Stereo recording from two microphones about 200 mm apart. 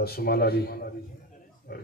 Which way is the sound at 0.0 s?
50° left (ahead or behind).